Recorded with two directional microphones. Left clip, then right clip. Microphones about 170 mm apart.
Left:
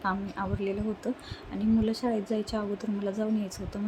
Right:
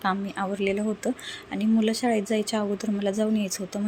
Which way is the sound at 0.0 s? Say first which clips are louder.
Right 4 dB; 15° right (ahead or behind).